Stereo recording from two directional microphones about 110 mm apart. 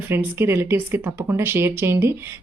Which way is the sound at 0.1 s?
20° right (ahead or behind).